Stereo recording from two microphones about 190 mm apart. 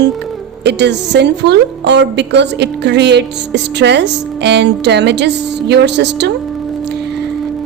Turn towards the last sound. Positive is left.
turn(degrees=-65)  # may be behind; listen again after turning